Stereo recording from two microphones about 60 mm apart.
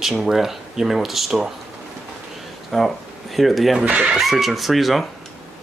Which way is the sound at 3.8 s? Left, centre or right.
Centre.